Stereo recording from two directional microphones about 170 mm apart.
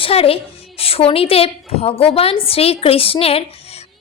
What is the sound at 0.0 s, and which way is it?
A woman's voice, 35° left (ahead or behind).